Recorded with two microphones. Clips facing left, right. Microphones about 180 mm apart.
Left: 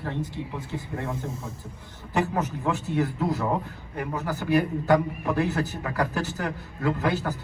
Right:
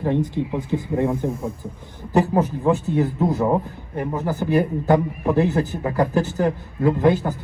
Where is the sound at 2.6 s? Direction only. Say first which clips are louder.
Right 6 dB; 20° right (ahead or behind).